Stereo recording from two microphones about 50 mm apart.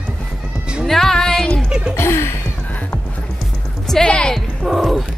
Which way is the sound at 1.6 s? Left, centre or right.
Centre.